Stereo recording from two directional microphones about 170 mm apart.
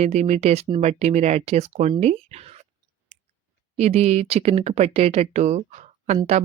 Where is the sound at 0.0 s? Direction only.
40° right (ahead or behind).